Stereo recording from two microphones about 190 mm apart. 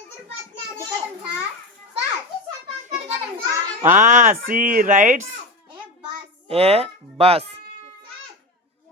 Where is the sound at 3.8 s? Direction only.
40° right (ahead or behind).